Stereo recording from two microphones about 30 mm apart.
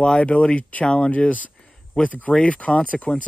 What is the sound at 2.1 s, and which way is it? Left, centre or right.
Speech, left.